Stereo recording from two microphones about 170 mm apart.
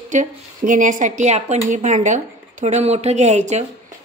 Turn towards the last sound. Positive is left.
turn(degrees=-45)  # may be behind; listen again after turning